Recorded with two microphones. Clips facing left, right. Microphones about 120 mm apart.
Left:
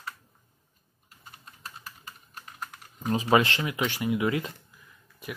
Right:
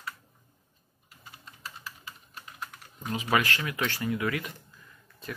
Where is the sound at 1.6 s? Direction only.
45° left (ahead or behind); by 3.8 s 25° left (ahead or behind).